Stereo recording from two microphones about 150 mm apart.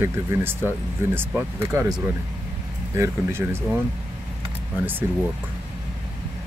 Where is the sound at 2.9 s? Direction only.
15° right (ahead or behind).